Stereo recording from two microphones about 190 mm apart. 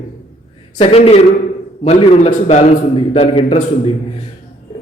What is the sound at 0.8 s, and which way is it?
A man's voice, 30° left (ahead or behind).